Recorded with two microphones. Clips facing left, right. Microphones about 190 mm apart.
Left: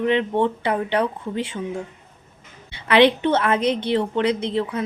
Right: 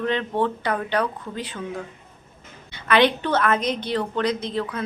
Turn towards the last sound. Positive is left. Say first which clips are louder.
# left 3 dB
turn(degrees=25)  # may be behind; listen again after turning